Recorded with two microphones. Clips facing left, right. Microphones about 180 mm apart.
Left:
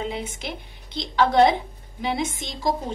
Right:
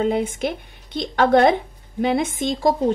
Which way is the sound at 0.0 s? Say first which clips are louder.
Right 9 dB; 50° right (ahead or behind).